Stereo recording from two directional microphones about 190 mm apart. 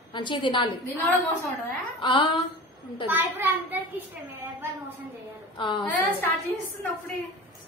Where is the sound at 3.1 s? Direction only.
10° right (ahead or behind).